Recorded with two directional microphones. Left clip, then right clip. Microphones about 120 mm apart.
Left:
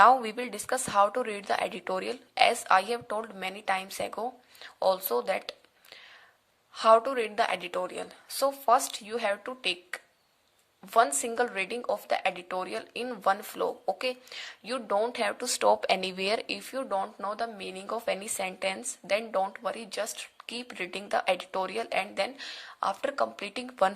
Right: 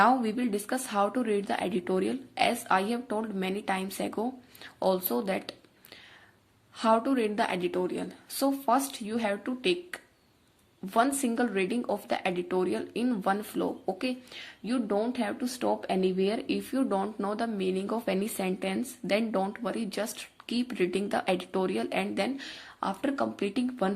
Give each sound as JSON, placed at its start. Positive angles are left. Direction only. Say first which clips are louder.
{"t": 0.0, "sound": "a woman's voice", "louder": "left 4 dB", "side_deg": 30}
{"t": 6.7, "sound": "a woman's voice", "louder": "left 4 dB", "side_deg": 25}
{"t": 16.8, "sound": "speech", "louder": "left 1 dB", "side_deg": 10}